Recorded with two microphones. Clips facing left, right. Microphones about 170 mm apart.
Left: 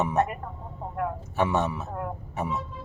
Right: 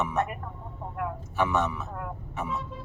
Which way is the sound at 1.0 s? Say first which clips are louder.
Left 2 dB; 35° left (ahead or behind).